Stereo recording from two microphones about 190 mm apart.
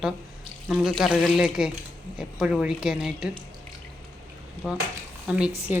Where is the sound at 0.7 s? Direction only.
Centre (ahead or behind).